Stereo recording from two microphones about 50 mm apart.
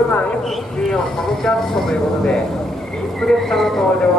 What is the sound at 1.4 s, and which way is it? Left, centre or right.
Speech, centre.